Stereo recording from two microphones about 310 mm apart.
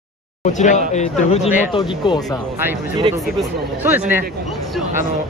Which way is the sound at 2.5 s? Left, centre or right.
Centre.